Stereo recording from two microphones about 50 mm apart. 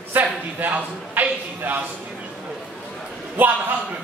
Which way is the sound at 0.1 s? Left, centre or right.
Right.